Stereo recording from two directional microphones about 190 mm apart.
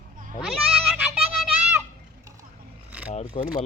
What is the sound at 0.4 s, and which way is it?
Goat, 5° right (ahead or behind).